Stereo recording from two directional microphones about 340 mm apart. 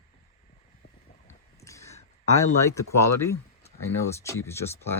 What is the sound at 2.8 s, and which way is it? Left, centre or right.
Speech, left.